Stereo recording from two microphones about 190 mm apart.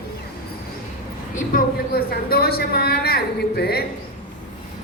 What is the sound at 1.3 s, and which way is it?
A woman's voice, 45° left (ahead or behind).